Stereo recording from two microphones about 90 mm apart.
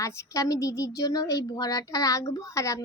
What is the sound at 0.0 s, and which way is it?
Speech, 40° left (ahead or behind).